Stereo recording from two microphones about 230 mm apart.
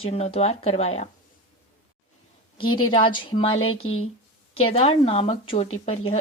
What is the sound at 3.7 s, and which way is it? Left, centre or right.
Speech, left.